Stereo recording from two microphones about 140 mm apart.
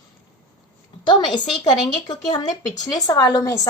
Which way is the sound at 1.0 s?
30° left (ahead or behind).